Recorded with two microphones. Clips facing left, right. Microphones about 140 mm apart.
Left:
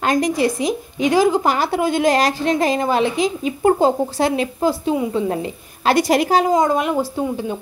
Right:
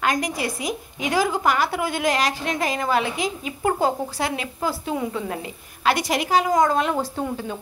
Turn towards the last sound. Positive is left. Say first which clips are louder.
# left 3 dB
turn(degrees=10)  # may be behind; listen again after turning